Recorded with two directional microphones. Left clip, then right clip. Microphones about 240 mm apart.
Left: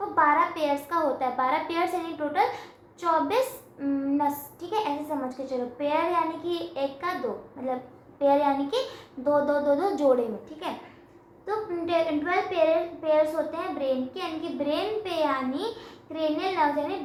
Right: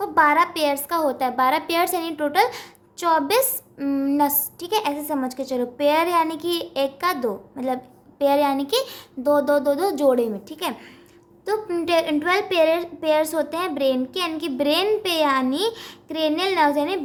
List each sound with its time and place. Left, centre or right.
0.1 s a woman's voice: right
8.2 s a woman's voice: right